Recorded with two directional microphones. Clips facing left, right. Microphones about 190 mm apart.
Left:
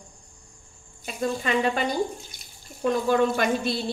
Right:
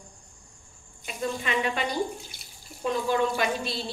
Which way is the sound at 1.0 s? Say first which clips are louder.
Left 4 dB; 40° left (ahead or behind).